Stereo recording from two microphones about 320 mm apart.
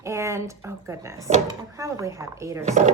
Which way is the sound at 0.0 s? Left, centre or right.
Centre.